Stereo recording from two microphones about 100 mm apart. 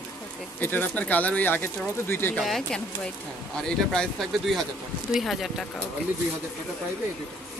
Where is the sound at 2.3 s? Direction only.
5° left (ahead or behind).